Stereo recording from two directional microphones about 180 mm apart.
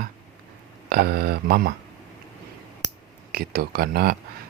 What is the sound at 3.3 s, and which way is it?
Speech, 60° right (ahead or behind).